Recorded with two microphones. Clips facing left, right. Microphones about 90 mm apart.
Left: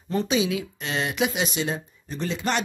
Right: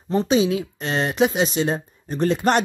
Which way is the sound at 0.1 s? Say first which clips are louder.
Right 5 dB; 35° right (ahead or behind).